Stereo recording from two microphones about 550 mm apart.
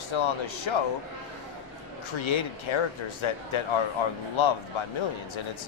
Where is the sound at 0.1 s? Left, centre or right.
Left.